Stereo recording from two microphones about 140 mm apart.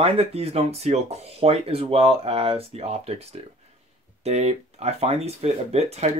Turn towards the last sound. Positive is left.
turn(degrees=-50)  # may be behind; listen again after turning